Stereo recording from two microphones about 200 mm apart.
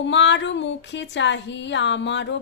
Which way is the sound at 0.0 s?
65° left (ahead or behind).